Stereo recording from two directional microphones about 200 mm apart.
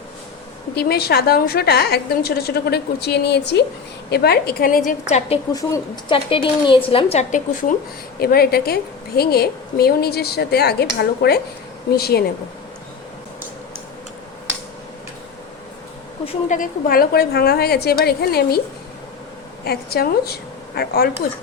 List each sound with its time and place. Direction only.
0.8 s a woman's voice: 50° left (ahead or behind)
4.9 s a woman's voice: 35° left (ahead or behind)
5.5 s speech: 20° left (ahead or behind); by 7.8 s 40° left (ahead or behind)
8.2 s a woman's voice: 50° left (ahead or behind)
16.2 s speech: 30° left (ahead or behind)
16.6 s a woman's voice: 50° left (ahead or behind)
19.6 s a woman's voice: 50° left (ahead or behind)